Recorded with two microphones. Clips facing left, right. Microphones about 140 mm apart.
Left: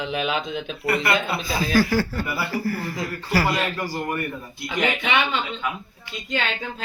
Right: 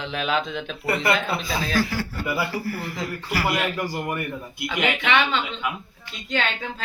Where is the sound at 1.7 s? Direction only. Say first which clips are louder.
Left 6 dB; 40° left (ahead or behind).